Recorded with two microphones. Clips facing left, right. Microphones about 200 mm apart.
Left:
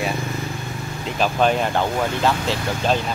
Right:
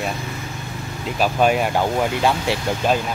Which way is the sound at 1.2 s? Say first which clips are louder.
Right 1 dB; 10° right (ahead or behind).